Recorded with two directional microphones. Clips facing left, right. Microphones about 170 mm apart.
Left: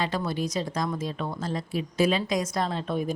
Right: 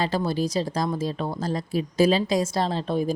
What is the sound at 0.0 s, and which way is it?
Speech, 35° right (ahead or behind).